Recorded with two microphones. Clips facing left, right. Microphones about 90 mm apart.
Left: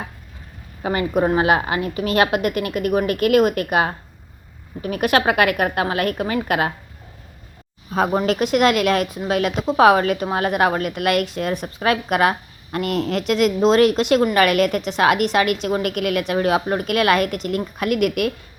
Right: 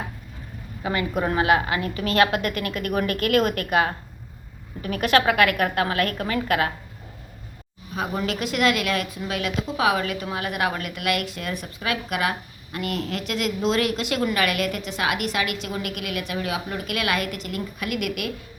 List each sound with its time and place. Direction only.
0.8 s a woman's voice: 30° left (ahead or behind)
2.0 s a woman's voice: 20° left (ahead or behind)
8.1 s a woman's voice: 40° left (ahead or behind)